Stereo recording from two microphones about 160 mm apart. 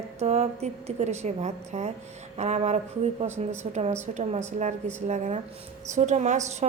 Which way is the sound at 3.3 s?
15° right (ahead or behind).